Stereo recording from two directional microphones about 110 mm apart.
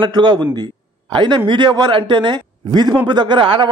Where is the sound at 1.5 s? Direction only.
40° right (ahead or behind).